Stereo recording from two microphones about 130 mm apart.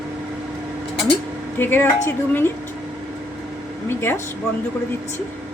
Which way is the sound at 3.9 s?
15° left (ahead or behind).